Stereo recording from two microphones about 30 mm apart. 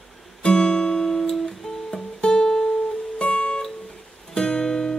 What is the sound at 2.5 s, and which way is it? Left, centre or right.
Music, centre.